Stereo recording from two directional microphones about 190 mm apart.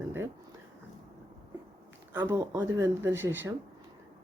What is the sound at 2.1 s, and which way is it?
Speech, 15° right (ahead or behind).